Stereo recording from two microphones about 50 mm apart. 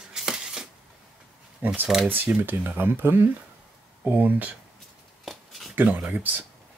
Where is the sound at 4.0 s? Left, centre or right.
Right.